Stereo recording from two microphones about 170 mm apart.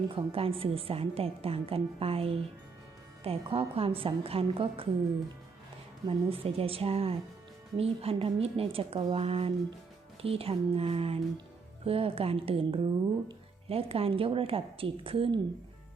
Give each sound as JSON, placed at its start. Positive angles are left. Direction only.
{"t": 0.1, "sound": "speech", "side_deg": -35}
{"t": 6.1, "sound": "speech", "side_deg": -35}